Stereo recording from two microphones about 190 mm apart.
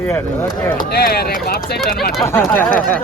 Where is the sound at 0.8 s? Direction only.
55° left (ahead or behind).